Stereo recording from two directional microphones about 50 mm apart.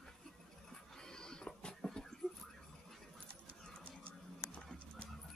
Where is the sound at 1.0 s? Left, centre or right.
Centre.